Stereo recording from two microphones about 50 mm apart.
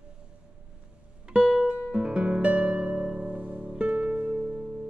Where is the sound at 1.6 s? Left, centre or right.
Centre.